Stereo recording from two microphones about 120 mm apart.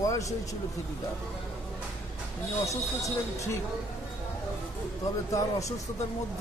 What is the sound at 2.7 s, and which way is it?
Speech, 25° left (ahead or behind).